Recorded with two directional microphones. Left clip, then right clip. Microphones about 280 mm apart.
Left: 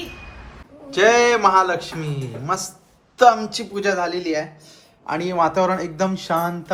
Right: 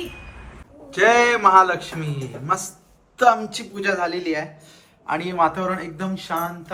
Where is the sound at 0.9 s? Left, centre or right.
Centre.